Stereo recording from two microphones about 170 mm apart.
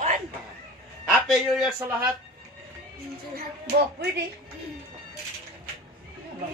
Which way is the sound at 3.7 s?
70° right (ahead or behind).